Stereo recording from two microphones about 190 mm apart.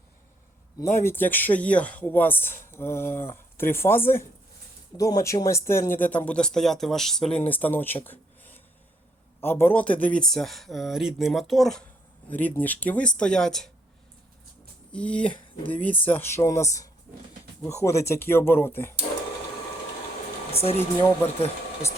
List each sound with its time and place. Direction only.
0.8 s speech: 15° left (ahead or behind)
14.9 s speech: 5° left (ahead or behind)
20.5 s a sound: 30° left (ahead or behind)
20.7 s speech: 10° left (ahead or behind)